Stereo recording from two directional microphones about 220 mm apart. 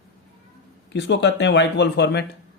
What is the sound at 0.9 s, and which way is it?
Speech, 55° left (ahead or behind).